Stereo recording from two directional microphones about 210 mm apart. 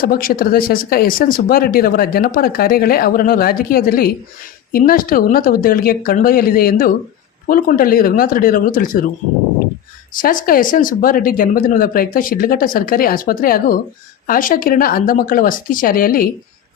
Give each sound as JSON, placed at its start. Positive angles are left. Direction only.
{"t": 0.0, "sound": "speech", "side_deg": 45}
{"t": 10.2, "sound": "speech", "side_deg": 40}